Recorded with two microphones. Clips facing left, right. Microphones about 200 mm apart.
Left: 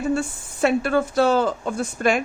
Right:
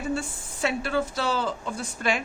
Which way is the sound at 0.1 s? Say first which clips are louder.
Left 6 dB; 50° left (ahead or behind).